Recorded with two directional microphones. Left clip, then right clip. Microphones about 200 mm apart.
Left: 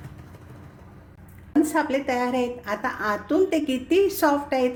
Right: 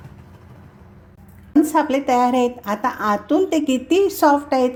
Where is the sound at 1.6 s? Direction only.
30° right (ahead or behind).